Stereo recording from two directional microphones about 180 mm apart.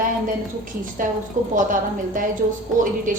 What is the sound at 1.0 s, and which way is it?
A woman's voice, 50° right (ahead or behind).